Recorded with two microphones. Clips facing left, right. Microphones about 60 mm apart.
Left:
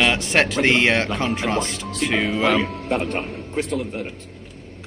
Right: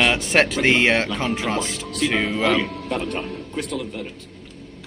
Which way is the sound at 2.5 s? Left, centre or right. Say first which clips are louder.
Left 2 dB; left.